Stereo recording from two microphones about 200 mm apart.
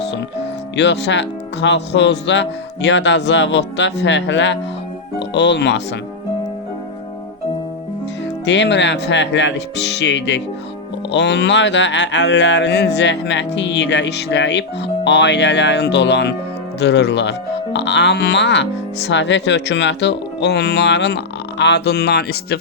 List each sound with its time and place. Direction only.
0.0 s speech: 60° left (ahead or behind)
8.4 s speech: 60° left (ahead or behind)